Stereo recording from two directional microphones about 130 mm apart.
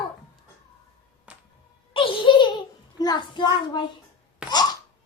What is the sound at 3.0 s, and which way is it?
Speech, 30° left (ahead or behind).